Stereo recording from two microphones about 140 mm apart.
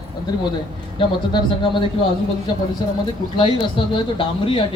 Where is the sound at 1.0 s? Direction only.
35° left (ahead or behind).